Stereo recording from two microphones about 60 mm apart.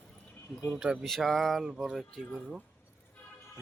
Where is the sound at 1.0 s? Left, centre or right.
Centre.